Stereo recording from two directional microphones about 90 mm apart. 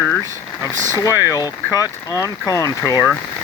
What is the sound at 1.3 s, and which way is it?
Speech, 40° left (ahead or behind).